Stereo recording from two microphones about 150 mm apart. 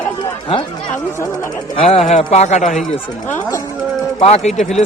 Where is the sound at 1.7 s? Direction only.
45° left (ahead or behind).